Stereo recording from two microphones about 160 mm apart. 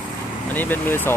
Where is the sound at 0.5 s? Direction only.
10° left (ahead or behind).